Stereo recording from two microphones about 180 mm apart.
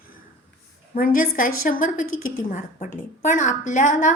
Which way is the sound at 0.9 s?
50° left (ahead or behind).